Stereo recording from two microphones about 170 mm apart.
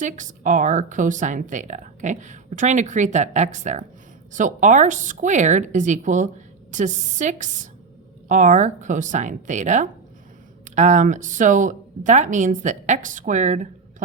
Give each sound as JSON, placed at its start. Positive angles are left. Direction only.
{"t": 0.0, "sound": "speech", "side_deg": -50}